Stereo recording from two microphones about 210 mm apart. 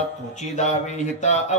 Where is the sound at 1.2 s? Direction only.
35° left (ahead or behind).